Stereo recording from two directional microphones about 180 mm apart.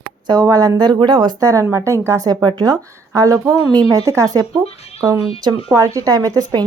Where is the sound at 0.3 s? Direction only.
20° right (ahead or behind).